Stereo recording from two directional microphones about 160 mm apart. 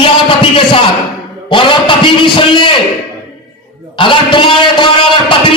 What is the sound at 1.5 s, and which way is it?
A man's voice, 30° left (ahead or behind).